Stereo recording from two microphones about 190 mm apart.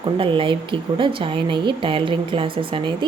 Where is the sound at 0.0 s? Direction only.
25° right (ahead or behind).